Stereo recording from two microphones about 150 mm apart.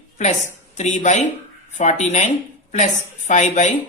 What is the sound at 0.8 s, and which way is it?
A woman's voice, 55° left (ahead or behind).